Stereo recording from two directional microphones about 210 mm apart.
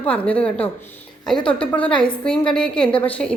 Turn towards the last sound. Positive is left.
turn(degrees=5)  # may be behind; listen again after turning